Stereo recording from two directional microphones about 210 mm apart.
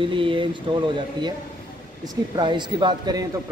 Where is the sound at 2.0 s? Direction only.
20° right (ahead or behind).